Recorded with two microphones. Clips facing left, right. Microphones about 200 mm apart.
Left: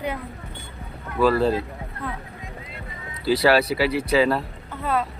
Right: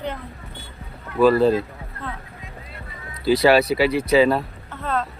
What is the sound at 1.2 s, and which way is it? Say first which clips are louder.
Speech: right 4 dB; 15° right (ahead or behind).